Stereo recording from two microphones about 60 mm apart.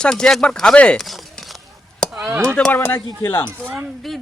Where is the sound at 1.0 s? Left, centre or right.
Centre.